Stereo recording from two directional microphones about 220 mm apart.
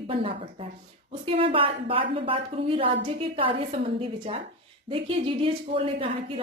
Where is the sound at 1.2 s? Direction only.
25° right (ahead or behind).